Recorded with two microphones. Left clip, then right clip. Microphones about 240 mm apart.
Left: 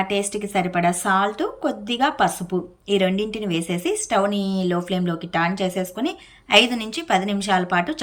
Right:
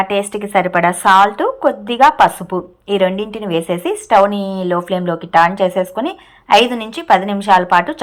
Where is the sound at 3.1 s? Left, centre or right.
Centre.